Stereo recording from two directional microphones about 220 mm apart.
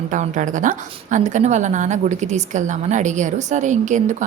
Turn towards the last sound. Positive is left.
turn(degrees=-35)  # may be behind; listen again after turning